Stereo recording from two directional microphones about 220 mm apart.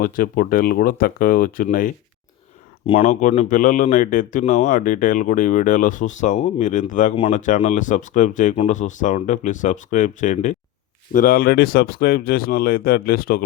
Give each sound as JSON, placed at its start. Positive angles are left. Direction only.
{"t": 0.0, "sound": "speech", "side_deg": 40}
{"t": 2.8, "sound": "speech", "side_deg": 25}